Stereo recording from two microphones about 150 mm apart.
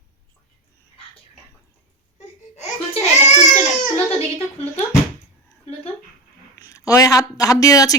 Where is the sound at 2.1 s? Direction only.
50° left (ahead or behind).